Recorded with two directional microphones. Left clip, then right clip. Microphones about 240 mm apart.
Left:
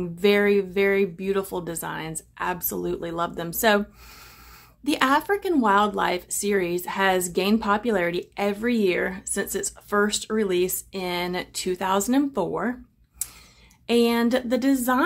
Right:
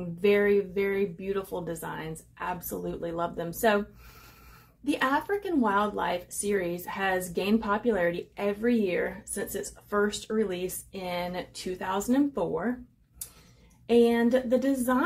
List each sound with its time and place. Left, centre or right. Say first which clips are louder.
0.2 s speech: left 3 dB; left
4.8 s speech: left 6 dB; left
13.8 s speech: left 1 dB; left